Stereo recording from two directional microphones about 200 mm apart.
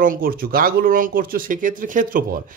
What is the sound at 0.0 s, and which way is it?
Speech, 45° right (ahead or behind).